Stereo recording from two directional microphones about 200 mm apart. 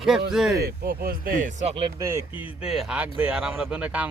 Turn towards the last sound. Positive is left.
turn(degrees=-5)  # may be behind; listen again after turning